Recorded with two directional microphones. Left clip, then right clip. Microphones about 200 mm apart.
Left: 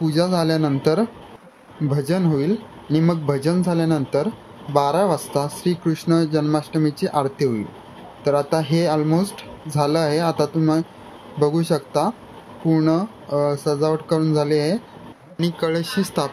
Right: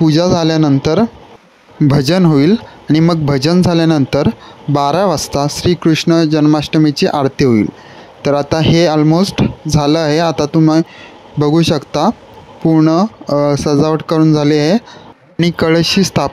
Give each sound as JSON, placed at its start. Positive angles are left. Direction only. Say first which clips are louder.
{"t": 0.0, "sound": "speech", "louder": "right 8 dB", "side_deg": -40}